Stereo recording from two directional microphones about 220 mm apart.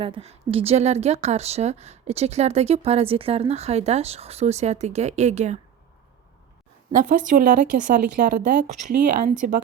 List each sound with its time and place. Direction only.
0.0 s a woman's voice: 25° right (ahead or behind)
6.9 s speech: 35° right (ahead or behind)